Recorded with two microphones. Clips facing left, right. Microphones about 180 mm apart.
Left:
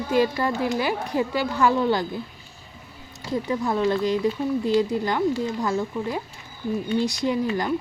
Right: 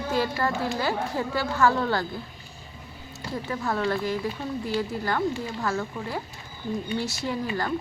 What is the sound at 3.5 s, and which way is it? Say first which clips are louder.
Speech: left 4 dB; 15° left (ahead or behind).